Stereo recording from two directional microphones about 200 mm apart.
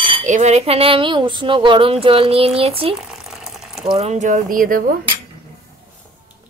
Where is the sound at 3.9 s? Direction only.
35° right (ahead or behind).